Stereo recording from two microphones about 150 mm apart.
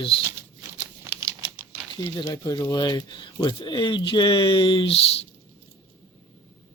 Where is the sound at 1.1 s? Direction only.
25° right (ahead or behind).